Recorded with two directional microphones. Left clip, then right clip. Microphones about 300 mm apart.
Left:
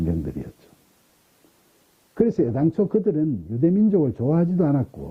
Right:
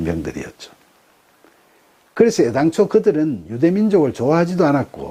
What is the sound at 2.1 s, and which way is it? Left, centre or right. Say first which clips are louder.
Speech: right 7 dB; centre.